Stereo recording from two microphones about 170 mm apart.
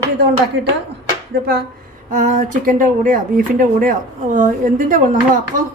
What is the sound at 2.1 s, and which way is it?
A woman's voice, 45° right (ahead or behind).